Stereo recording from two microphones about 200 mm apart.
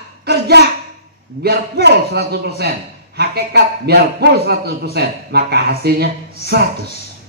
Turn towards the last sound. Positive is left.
turn(degrees=-55)  # may be behind; listen again after turning